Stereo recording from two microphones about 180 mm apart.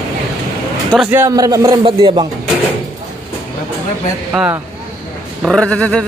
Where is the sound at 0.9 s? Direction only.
10° right (ahead or behind).